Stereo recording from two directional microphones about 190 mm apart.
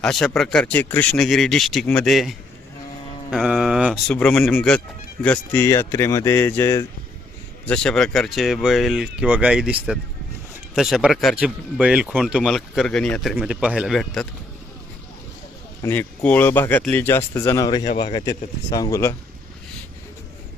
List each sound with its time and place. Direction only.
0.0 s speech: 5° left (ahead or behind)
3.2 s mantra: centre (ahead or behind)
4.1 s speech: 5° left (ahead or behind)
15.8 s speech: 10° left (ahead or behind)